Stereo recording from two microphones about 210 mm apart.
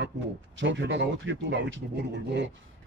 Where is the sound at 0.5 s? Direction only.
65° right (ahead or behind).